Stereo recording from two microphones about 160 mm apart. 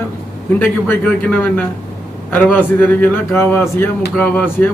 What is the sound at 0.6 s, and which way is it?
A man's voice, 10° left (ahead or behind).